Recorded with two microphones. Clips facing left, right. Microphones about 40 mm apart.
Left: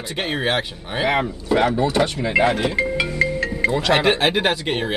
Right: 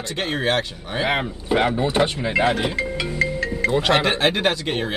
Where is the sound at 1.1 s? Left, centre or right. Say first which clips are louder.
Left 3 dB; centre.